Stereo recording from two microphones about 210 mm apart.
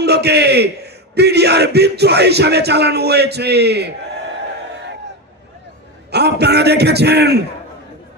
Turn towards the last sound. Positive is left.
turn(degrees=-50)  # may be behind; listen again after turning